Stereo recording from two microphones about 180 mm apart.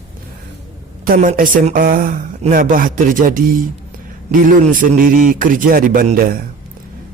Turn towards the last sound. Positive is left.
turn(degrees=-55)  # may be behind; listen again after turning